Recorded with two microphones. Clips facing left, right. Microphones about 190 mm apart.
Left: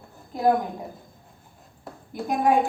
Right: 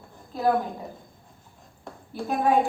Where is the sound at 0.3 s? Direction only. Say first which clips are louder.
Left 2 dB; 15° left (ahead or behind).